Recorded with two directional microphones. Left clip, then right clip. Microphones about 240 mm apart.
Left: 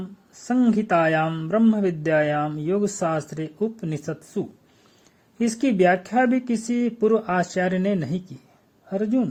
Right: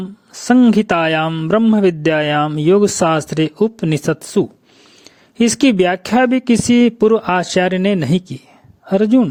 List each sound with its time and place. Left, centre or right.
0.0 s speech: right